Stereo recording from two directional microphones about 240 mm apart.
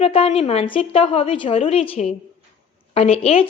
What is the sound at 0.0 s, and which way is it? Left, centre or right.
Speech, left.